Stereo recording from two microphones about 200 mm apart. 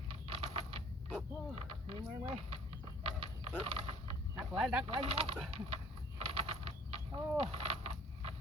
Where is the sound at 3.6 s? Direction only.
30° right (ahead or behind).